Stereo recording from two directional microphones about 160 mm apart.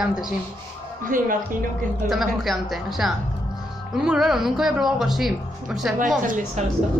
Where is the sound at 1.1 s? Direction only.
55° right (ahead or behind).